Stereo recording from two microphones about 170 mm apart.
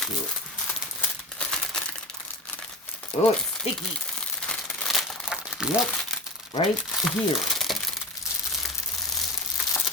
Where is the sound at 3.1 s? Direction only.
40° left (ahead or behind).